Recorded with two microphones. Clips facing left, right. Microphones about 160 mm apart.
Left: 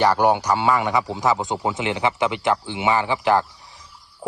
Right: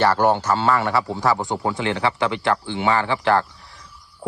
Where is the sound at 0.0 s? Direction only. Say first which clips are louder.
Even; 15° left (ahead or behind).